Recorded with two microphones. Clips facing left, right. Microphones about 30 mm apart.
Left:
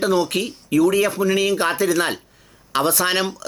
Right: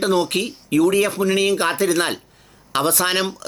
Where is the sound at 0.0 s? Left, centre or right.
Right.